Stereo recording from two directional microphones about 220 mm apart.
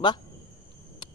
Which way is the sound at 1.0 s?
20° left (ahead or behind).